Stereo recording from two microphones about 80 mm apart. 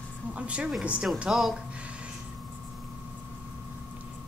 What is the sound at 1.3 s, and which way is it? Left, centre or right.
Speech, centre.